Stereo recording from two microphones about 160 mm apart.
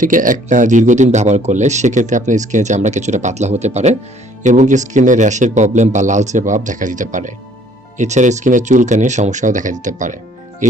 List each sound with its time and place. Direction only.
0.0 s speech: 55° right (ahead or behind)